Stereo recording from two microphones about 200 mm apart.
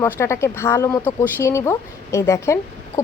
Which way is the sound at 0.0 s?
15° left (ahead or behind).